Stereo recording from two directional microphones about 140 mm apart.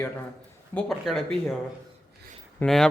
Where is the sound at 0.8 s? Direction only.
5° left (ahead or behind).